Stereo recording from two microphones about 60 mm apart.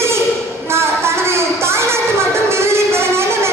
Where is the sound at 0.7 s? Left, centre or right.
Right.